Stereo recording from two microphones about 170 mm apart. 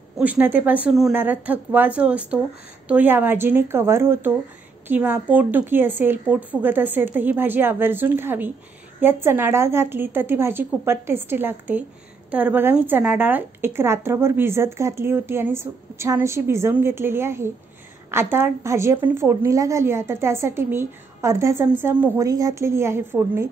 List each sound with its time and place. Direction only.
0.2 s a woman's voice: 10° right (ahead or behind)